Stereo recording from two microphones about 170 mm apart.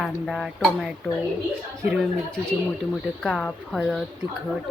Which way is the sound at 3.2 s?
Centre (ahead or behind).